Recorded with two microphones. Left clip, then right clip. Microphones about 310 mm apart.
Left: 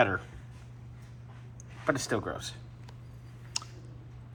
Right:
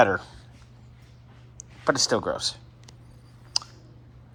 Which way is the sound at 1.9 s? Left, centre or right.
Centre.